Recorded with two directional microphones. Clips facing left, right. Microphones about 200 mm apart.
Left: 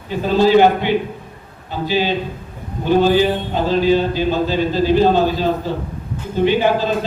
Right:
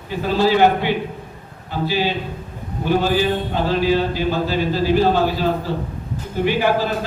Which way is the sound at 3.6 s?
20° left (ahead or behind).